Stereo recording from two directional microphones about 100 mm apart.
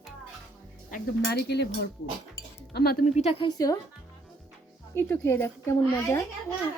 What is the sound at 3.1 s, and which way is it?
Speech, 80° left.